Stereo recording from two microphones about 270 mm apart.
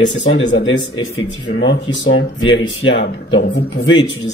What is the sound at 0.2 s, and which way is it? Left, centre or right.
Speech, left.